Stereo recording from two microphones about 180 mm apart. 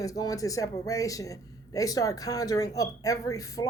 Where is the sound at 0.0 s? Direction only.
20° left (ahead or behind).